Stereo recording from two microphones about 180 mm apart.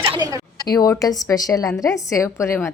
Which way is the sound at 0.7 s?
20° left (ahead or behind).